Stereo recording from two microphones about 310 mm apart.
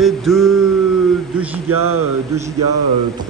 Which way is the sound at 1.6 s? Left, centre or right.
Right.